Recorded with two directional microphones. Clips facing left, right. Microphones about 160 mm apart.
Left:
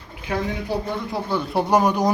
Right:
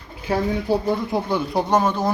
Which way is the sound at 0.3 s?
30° right (ahead or behind).